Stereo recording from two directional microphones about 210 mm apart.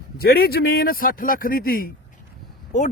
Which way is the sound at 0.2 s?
45° left (ahead or behind).